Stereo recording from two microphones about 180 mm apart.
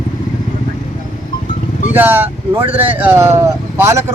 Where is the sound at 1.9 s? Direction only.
10° right (ahead or behind).